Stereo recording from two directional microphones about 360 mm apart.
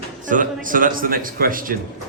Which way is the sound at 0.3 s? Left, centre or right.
Right.